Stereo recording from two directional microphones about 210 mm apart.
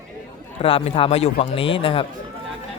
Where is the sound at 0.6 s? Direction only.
25° left (ahead or behind).